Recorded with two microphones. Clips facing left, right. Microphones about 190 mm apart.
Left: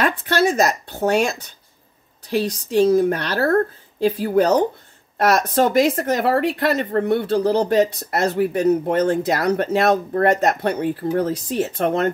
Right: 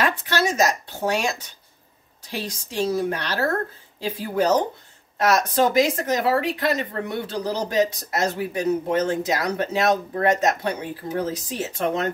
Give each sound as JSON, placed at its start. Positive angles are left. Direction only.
{"t": 0.0, "sound": "speech", "side_deg": 55}
{"t": 2.7, "sound": "speech", "side_deg": 55}